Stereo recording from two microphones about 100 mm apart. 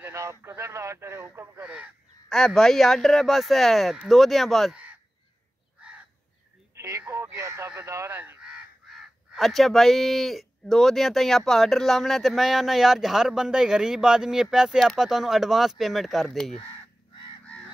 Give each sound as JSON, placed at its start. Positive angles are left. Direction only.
{"t": 0.0, "sound": "speech", "side_deg": -30}
{"t": 2.2, "sound": "speech", "side_deg": 5}
{"t": 6.8, "sound": "speech", "side_deg": -30}
{"t": 8.4, "sound": "speech", "side_deg": -5}